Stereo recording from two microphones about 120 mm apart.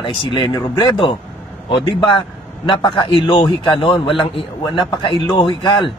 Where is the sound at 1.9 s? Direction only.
45° left (ahead or behind).